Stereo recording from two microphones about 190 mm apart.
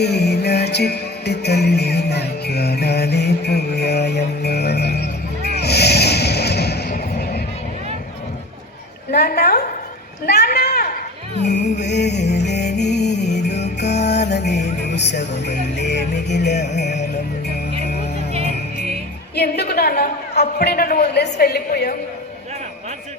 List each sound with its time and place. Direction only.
0.0 s music: 60° left (ahead or behind)
9.1 s a man's voice: 55° left (ahead or behind)
10.2 s a sound: 60° left (ahead or behind)
11.8 s music: 65° left (ahead or behind)
18.3 s music: 35° right (ahead or behind)
19.4 s a woman's voice: 55° left (ahead or behind)